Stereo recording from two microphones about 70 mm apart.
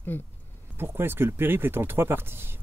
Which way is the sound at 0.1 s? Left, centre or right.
Left.